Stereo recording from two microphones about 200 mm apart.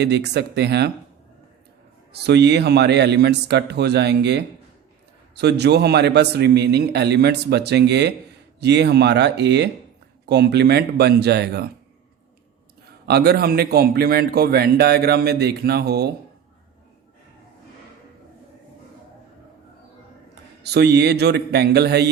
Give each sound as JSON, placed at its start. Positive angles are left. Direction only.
{"t": 0.0, "sound": "a man's voice", "side_deg": -55}
{"t": 2.1, "sound": "a man's voice", "side_deg": -55}
{"t": 12.8, "sound": "a man's voice", "side_deg": -50}
{"t": 20.6, "sound": "a man's voice", "side_deg": -55}